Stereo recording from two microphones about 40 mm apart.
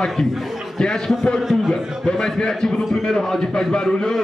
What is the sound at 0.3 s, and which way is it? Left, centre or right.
Speech, centre.